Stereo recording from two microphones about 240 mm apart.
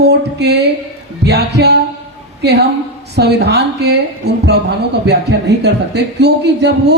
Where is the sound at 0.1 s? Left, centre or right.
Right.